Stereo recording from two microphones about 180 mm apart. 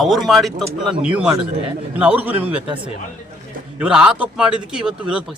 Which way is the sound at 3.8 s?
5° right (ahead or behind).